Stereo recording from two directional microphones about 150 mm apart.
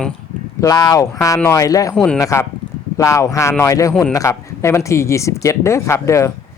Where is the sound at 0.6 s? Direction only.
25° left (ahead or behind).